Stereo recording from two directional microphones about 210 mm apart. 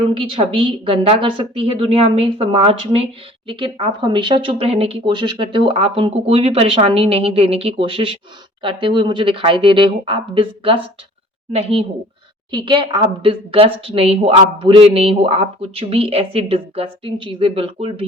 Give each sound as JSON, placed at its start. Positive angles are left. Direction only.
{"t": 0.1, "sound": "speech", "side_deg": -25}